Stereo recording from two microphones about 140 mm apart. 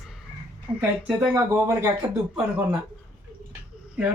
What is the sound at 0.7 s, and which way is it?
Speech, 10° right (ahead or behind).